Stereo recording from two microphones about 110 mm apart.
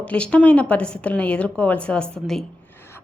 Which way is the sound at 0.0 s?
10° left (ahead or behind).